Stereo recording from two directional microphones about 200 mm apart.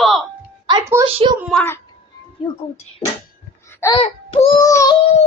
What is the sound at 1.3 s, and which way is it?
Speech, 5° right (ahead or behind).